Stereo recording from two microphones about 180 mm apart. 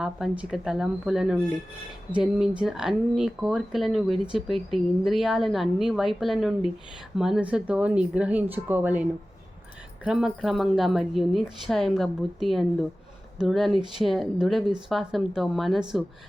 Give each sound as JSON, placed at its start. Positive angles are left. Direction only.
{"t": 0.0, "sound": "speech", "side_deg": 0}